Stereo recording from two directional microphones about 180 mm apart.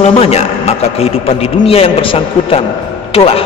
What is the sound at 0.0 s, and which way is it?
A man's voice, 35° left (ahead or behind).